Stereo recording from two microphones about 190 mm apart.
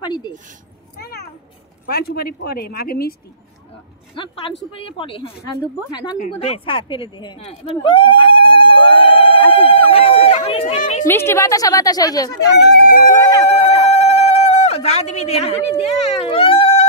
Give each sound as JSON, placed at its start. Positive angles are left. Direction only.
{"t": 0.0, "sound": "a sound", "side_deg": 25}
{"t": 0.9, "sound": "cat", "side_deg": 55}
{"t": 1.9, "sound": "speech", "side_deg": 55}
{"t": 4.1, "sound": "a woman's voice", "side_deg": 30}
{"t": 6.1, "sound": "a woman's voice", "side_deg": 40}
{"t": 11.1, "sound": "a woman's voice", "side_deg": 15}
{"t": 12.7, "sound": "speech", "side_deg": 50}
{"t": 13.2, "sound": "a woman's voice", "side_deg": 20}
{"t": 13.5, "sound": "a sound", "side_deg": 35}
{"t": 16.3, "sound": "speech", "side_deg": 30}